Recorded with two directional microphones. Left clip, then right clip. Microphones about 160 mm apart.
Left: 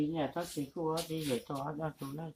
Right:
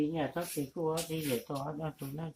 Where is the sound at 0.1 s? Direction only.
15° right (ahead or behind).